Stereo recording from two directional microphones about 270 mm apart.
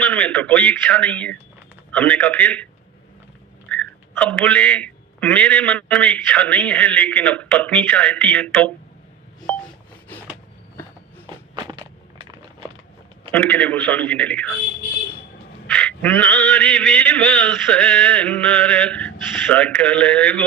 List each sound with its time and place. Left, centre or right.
0.0 s a man's voice: centre
3.7 s a man's voice: centre
9.5 s telephone dialing: centre
11.3 s a sound: centre
13.3 s a man's voice: centre
15.6 s a man's voice: centre